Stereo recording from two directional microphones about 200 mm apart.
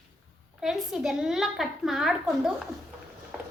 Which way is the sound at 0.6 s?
Centre (ahead or behind).